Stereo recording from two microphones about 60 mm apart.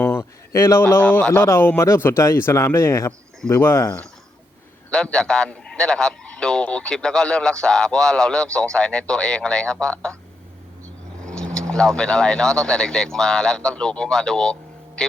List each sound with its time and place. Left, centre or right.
0.2 s a sound: left
0.9 s speech: left
5.1 s a man's voice: centre
11.3 s vehicle: centre
11.7 s speech: centre